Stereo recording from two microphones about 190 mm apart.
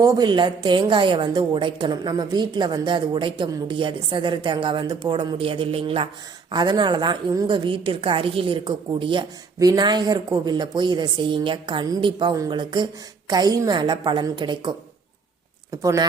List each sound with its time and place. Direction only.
0.0 s a woman's voice: 20° right (ahead or behind)
15.7 s speech: 20° right (ahead or behind)